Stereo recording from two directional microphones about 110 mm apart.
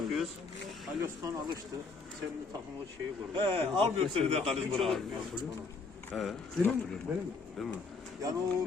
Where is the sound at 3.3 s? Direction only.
50° right (ahead or behind).